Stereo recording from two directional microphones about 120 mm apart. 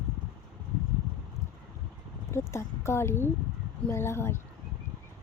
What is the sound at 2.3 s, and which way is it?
Speech, 20° left (ahead or behind).